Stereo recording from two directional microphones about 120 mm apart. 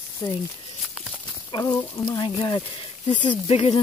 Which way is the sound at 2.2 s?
40° left (ahead or behind).